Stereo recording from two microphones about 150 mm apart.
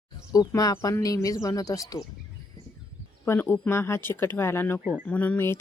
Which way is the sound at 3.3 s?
15° left (ahead or behind).